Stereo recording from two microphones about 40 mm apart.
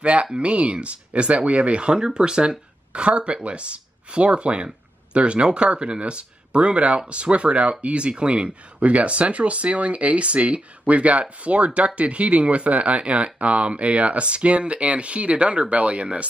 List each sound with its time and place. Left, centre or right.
0.0 s speech: right